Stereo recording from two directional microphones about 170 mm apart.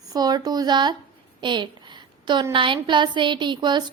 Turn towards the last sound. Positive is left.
turn(degrees=-25)  # may be behind; listen again after turning